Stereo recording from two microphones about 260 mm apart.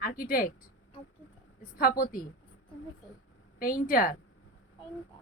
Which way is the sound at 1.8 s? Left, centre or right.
Left.